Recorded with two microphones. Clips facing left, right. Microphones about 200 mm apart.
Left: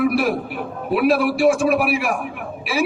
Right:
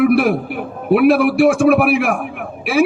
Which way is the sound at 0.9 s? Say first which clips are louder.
Right 6 dB; 60° right (ahead or behind).